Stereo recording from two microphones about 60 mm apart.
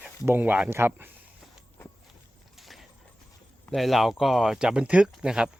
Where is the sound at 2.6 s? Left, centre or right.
Centre.